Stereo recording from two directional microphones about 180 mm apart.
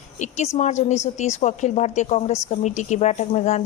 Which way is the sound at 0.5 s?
40° left (ahead or behind).